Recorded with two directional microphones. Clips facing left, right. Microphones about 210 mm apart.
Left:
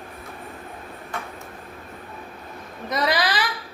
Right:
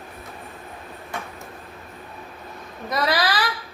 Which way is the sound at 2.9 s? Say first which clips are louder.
Even; 20° left (ahead or behind).